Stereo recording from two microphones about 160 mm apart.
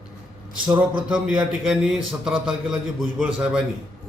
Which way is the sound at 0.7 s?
5° right (ahead or behind).